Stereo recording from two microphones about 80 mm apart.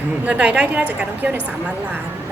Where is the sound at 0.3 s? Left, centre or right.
Centre.